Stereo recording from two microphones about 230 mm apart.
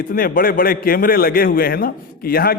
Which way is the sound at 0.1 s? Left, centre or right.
Left.